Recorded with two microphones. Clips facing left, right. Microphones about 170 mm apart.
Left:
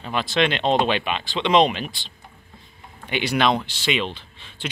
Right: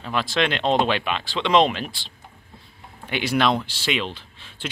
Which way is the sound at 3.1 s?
5° right (ahead or behind).